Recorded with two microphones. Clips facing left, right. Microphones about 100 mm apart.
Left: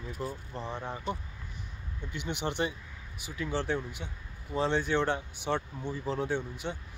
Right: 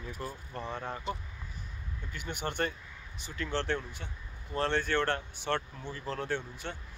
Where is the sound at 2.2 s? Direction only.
45° right (ahead or behind).